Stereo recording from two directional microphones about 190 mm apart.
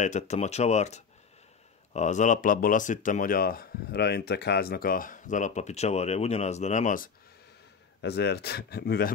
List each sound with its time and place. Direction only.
0.0 s speech: 35° left (ahead or behind)
8.0 s speech: 60° left (ahead or behind)